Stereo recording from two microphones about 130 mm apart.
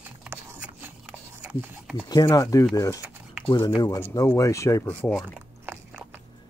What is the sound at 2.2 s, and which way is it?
Speech, 25° left (ahead or behind).